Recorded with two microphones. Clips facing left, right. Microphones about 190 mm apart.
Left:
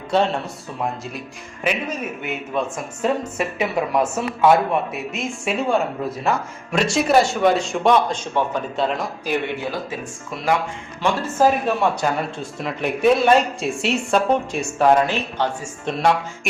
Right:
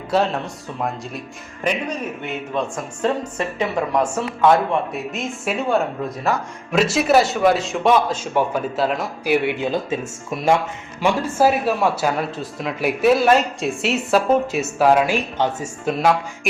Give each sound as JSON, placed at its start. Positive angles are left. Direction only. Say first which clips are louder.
{"t": 1.6, "sound": "speech", "louder": "right 1 dB", "side_deg": 5}
{"t": 9.9, "sound": "speech", "louder": "right 5 dB", "side_deg": -25}
{"t": 11.0, "sound": "speech", "louder": "right 1 dB", "side_deg": -10}